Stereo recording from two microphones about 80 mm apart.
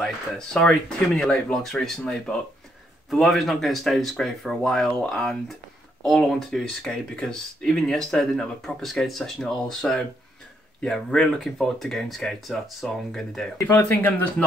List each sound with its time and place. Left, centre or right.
0.0 s speech: centre
13.6 s speech: left
13.8 s speech: left